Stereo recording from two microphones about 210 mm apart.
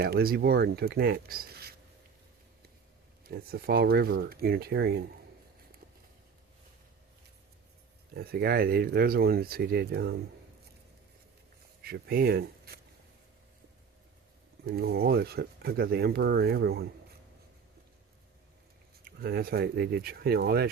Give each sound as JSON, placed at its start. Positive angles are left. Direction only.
{"t": 0.0, "sound": "speech", "side_deg": -45}
{"t": 3.2, "sound": "speech", "side_deg": -45}
{"t": 8.1, "sound": "speech", "side_deg": -50}
{"t": 11.8, "sound": "speech", "side_deg": -45}
{"t": 14.7, "sound": "speech", "side_deg": -45}
{"t": 19.0, "sound": "speech", "side_deg": -45}